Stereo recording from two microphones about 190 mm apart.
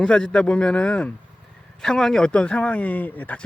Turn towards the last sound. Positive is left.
turn(degrees=10)  # may be behind; listen again after turning